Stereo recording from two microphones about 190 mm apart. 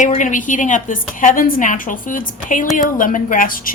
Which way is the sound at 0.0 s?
40° left (ahead or behind).